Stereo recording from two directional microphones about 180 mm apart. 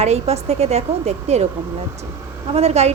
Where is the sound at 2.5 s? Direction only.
35° right (ahead or behind).